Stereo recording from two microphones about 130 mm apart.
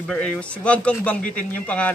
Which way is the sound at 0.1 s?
5° left (ahead or behind).